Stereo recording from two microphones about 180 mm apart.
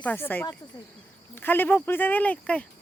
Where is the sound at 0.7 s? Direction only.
25° left (ahead or behind).